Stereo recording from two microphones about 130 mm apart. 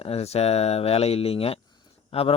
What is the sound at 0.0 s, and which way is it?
Speech, 50° left (ahead or behind).